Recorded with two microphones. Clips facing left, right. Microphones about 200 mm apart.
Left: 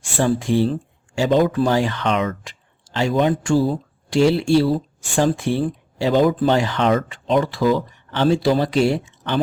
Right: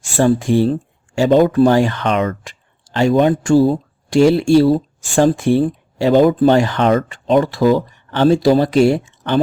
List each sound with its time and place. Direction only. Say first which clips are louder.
0.2 s speech: right 5 dB; 45° right (ahead or behind)